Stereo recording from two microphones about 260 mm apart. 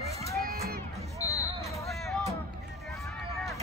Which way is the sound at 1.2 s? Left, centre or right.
Centre.